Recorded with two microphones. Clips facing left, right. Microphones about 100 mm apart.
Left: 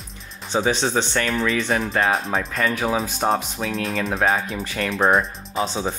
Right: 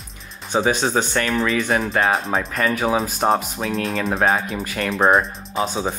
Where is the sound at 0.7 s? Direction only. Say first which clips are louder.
Right 1 dB; 10° right (ahead or behind).